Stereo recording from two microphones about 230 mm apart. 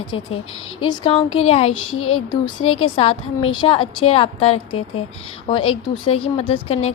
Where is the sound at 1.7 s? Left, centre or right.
Left.